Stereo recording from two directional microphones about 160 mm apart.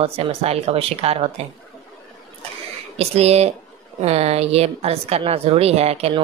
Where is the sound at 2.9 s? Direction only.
40° right (ahead or behind).